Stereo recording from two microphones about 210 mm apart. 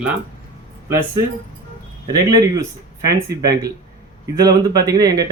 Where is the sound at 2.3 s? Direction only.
15° right (ahead or behind).